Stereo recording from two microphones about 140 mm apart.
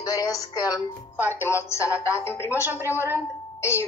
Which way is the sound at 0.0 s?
25° left (ahead or behind).